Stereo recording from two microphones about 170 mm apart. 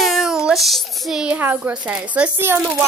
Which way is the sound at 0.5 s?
Centre (ahead or behind).